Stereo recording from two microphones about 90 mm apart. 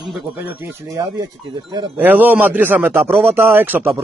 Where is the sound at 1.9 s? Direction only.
20° right (ahead or behind).